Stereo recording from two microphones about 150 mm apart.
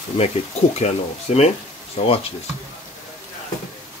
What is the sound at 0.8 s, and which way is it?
Speech, 45° left (ahead or behind).